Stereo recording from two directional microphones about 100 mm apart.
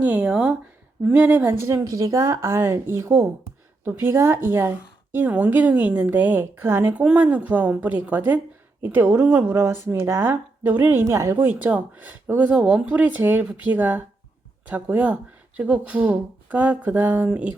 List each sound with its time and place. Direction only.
0.0 s speech: 10° right (ahead or behind)
1.6 s a woman's voice: 30° right (ahead or behind); by 17.5 s 15° right (ahead or behind)